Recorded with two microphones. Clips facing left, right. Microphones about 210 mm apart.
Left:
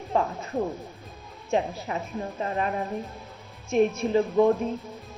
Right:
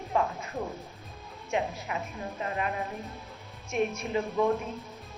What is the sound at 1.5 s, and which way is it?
A woman's voice, 30° left (ahead or behind).